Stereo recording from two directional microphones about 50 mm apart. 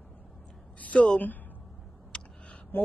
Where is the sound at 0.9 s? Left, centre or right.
Left.